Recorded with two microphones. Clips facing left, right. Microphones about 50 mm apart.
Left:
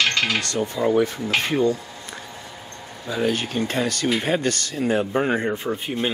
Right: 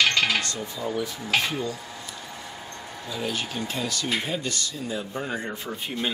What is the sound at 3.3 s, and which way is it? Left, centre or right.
Speech, left.